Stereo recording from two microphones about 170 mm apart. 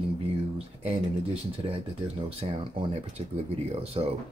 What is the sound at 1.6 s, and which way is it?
Speech, 30° right (ahead or behind).